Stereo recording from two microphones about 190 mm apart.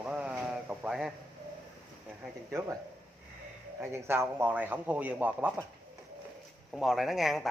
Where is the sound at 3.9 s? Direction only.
15° right (ahead or behind).